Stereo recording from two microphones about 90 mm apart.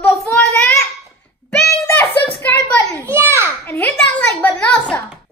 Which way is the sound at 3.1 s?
30° right (ahead or behind).